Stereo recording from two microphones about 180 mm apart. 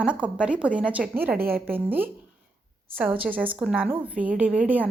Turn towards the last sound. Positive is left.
turn(degrees=-5)  # may be behind; listen again after turning